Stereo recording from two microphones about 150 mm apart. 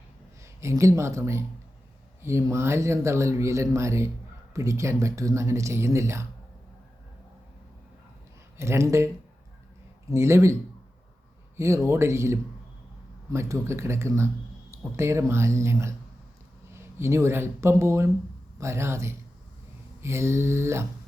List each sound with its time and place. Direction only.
0.4 s speech: 20° right (ahead or behind)
8.5 s speech: 20° right (ahead or behind)
10.1 s speech: 20° right (ahead or behind)
11.5 s speech: 20° right (ahead or behind)